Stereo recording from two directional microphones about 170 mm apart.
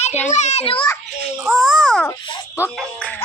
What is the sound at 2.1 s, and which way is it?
Speech, 20° left (ahead or behind).